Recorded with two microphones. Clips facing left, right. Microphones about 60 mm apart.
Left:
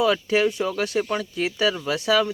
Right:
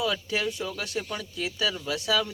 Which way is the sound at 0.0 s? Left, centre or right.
Left.